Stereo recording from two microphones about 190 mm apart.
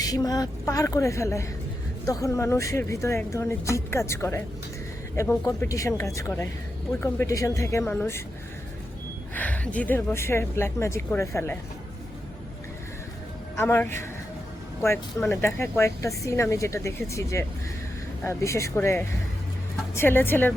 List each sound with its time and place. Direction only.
0.0 s speech: 20° left (ahead or behind)
9.3 s speech: 10° left (ahead or behind)
13.6 s speech: 10° left (ahead or behind)
15.3 s speech: 10° left (ahead or behind)